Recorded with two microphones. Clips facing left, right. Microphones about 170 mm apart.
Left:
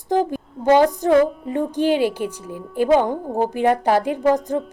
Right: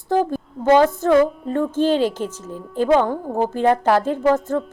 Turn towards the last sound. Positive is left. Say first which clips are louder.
# even
turn(degrees=15)  # may be behind; listen again after turning